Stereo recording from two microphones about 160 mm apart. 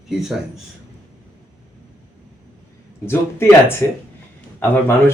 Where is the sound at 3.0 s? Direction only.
15° left (ahead or behind).